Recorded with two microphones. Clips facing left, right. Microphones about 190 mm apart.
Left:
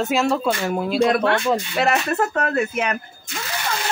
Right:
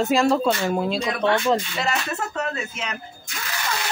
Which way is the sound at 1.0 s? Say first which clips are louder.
Left 4 dB; 60° left (ahead or behind).